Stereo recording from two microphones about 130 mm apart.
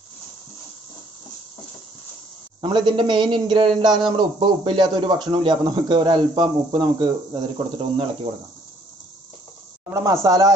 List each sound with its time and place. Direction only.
2.6 s speech: 35° right (ahead or behind)
9.8 s speech: 25° right (ahead or behind)